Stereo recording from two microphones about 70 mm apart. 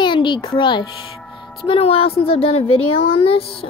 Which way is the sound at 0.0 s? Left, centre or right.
Left.